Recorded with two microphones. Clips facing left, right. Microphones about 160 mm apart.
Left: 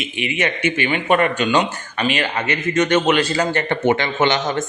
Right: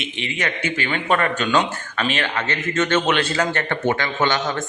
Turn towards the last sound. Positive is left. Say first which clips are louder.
# left 3 dB
turn(degrees=20)  # may be behind; listen again after turning